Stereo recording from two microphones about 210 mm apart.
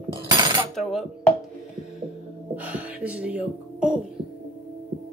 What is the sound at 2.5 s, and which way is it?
Speech, 5° right (ahead or behind).